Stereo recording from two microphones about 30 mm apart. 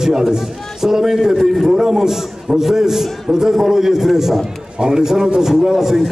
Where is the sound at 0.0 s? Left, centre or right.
Centre.